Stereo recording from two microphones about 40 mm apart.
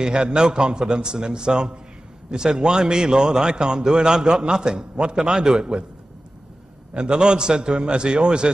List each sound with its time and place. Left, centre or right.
0.0 s a man's voice: right
6.9 s a man's voice: right